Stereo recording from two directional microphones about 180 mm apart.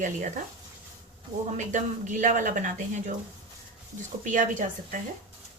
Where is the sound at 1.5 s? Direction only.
45° right (ahead or behind).